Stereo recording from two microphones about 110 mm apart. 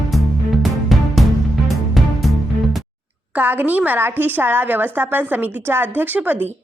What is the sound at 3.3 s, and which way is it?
A woman's voice, 15° right (ahead or behind).